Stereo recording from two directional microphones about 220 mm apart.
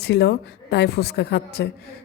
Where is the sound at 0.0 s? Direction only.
50° left (ahead or behind).